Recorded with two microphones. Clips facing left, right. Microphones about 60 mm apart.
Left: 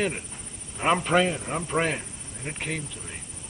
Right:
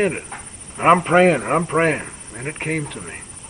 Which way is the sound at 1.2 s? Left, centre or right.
Right.